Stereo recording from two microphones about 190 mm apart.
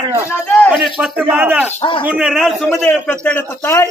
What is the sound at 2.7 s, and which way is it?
Speech, 10° left (ahead or behind).